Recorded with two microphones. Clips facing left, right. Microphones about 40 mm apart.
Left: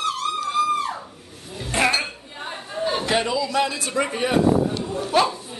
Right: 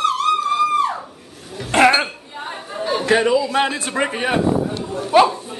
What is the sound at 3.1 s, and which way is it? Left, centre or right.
A man's voice, right.